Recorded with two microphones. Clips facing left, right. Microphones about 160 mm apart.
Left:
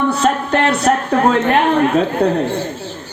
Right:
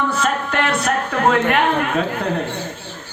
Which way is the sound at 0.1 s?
35° left (ahead or behind).